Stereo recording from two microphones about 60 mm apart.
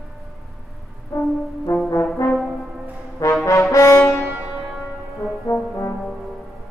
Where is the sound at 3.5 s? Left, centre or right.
Left.